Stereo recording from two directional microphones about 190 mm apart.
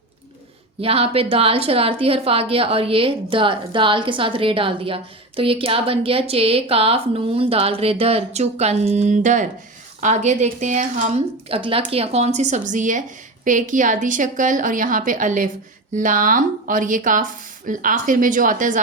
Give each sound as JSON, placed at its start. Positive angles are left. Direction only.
{"t": 0.8, "sound": "a woman's voice", "side_deg": -30}